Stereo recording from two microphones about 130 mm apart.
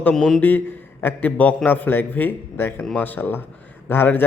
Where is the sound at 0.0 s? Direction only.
5° left (ahead or behind).